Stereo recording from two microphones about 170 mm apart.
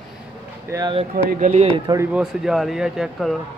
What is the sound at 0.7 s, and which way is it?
Speech, 25° right (ahead or behind).